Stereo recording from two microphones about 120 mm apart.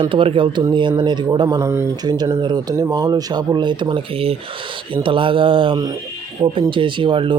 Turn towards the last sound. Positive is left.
turn(degrees=-45)  # may be behind; listen again after turning